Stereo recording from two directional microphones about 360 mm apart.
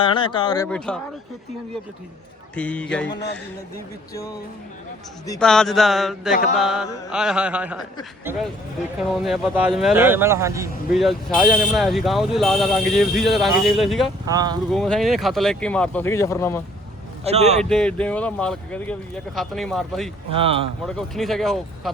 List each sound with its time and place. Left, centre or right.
0.0 s speech: centre
2.6 s speech: centre
5.2 s a man's voice: centre
14.7 s speech: centre
17.2 s a man's voice: centre
17.6 s speech: centre
20.3 s a man's voice: centre
20.8 s speech: centre